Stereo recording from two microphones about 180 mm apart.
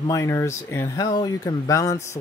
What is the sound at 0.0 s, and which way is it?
Speech, 15° left (ahead or behind).